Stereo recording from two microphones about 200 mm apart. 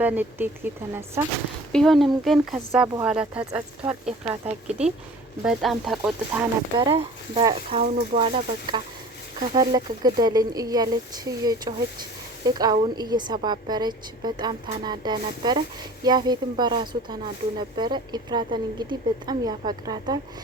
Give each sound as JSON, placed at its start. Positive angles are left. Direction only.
{"t": 0.0, "sound": "speech", "side_deg": -10}
{"t": 1.7, "sound": "speech", "side_deg": 0}
{"t": 2.6, "sound": "speech", "side_deg": -10}
{"t": 5.4, "sound": "speech", "side_deg": 0}
{"t": 6.7, "sound": "speech", "side_deg": -25}